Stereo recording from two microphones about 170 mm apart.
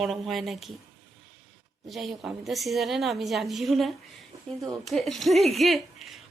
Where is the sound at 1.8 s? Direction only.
Centre (ahead or behind).